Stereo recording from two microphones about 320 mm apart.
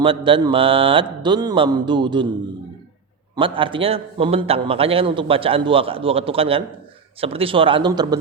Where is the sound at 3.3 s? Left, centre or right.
Centre.